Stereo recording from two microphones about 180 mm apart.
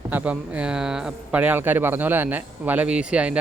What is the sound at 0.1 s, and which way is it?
A man's voice, 10° right (ahead or behind).